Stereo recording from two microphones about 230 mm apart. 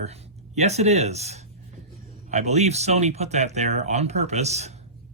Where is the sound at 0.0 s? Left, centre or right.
Right.